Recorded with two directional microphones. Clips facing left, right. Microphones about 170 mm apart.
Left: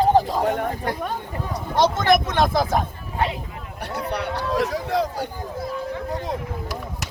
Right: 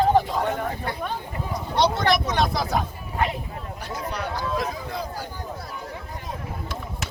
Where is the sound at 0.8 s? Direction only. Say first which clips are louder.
Left 3 dB; 45° left (ahead or behind).